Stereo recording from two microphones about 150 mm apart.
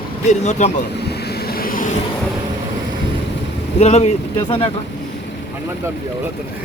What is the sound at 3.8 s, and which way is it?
Speech, 45° left (ahead or behind).